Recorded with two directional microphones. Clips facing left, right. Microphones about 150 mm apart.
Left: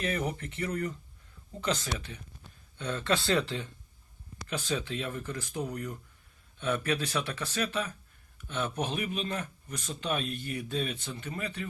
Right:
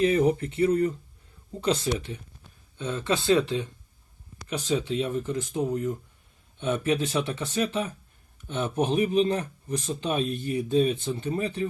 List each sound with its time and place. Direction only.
0.2 s speech: 30° right (ahead or behind)
2.7 s speech: 20° right (ahead or behind)